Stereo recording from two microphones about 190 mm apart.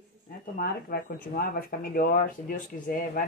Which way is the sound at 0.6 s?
50° left (ahead or behind).